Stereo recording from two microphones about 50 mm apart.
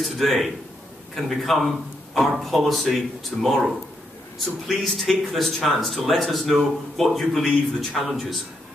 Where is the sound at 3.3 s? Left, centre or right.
Left.